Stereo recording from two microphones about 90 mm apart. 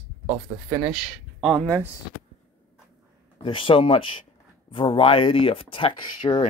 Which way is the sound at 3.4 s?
80° left.